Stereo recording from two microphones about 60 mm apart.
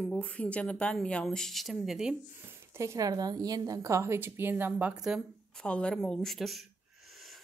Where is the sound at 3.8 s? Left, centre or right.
Right.